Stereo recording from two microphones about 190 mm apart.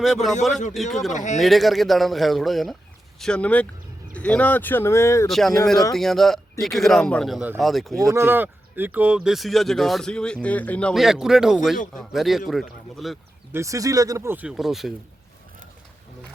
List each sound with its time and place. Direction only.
0.0 s speech: centre (ahead or behind)
1.1 s speech: 40° left (ahead or behind)
1.4 s speech: centre (ahead or behind)
5.3 s speech: centre (ahead or behind)
8.0 s speech: 15° right (ahead or behind)
13.5 s speech: 15° right (ahead or behind)